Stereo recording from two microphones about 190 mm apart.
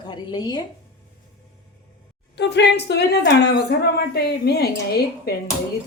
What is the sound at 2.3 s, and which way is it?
A woman's voice, 65° left (ahead or behind).